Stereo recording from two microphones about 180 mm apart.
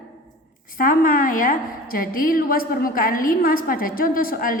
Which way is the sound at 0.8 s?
50° left (ahead or behind).